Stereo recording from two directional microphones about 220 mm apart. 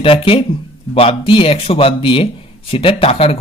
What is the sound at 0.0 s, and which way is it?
A man's voice, 25° left (ahead or behind).